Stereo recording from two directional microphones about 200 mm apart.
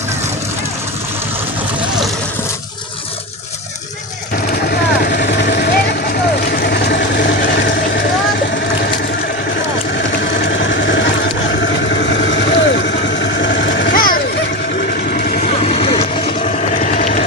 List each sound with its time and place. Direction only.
4.7 s vehicle: 55° left (ahead or behind)
10.5 s vehicle: 65° left (ahead or behind)
13.9 s a sound: 45° left (ahead or behind)
15.1 s vehicle: 45° left (ahead or behind)